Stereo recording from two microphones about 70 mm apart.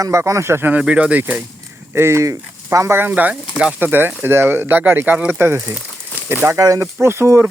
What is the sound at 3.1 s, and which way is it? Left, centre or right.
Speech, right.